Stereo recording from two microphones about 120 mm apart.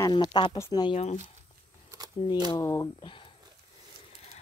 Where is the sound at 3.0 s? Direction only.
45° left (ahead or behind).